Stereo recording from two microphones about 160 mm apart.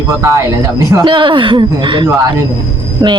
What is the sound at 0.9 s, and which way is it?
Speech, 30° right (ahead or behind).